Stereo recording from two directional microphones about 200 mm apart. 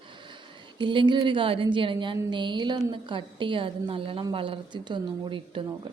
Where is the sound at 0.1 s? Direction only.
25° right (ahead or behind).